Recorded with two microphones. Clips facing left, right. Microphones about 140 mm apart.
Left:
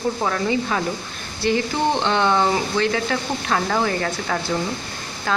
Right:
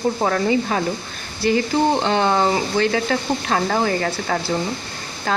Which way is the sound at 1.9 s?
40° right (ahead or behind).